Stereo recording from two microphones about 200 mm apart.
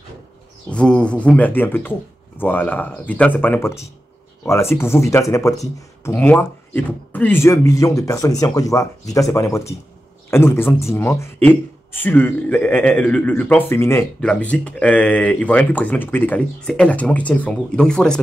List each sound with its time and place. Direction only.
0.7 s a man's voice: 5° left (ahead or behind)